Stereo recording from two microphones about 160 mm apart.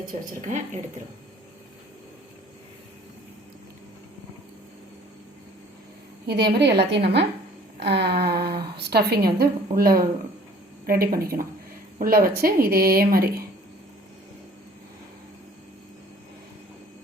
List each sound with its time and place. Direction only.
0.0 s speech: 50° right (ahead or behind)
6.2 s a woman's voice: 90° right; by 13.4 s 70° right (ahead or behind)